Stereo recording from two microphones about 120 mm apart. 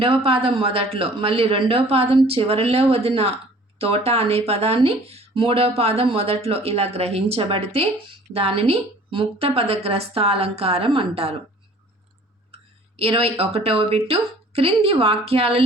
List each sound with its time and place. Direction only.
0.0 s speech: 50° right (ahead or behind)
13.0 s a woman's voice: 50° right (ahead or behind)